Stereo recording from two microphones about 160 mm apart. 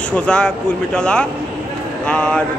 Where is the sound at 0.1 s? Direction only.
5° left (ahead or behind).